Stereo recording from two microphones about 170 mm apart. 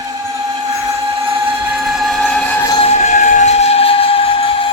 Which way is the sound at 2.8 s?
40° left (ahead or behind).